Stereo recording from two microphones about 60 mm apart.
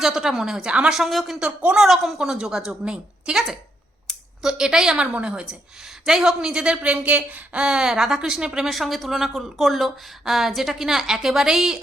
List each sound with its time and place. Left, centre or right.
0.0 s speech: centre
0.9 s a woman's voice: centre
1.4 s speech: centre
1.8 s speech: centre
4.4 s speech: centre